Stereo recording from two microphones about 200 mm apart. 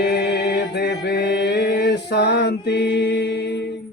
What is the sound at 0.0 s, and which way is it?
Mantra, 50° left (ahead or behind).